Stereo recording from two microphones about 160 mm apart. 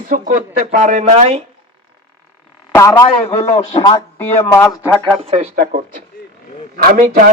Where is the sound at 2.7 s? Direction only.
20° left (ahead or behind).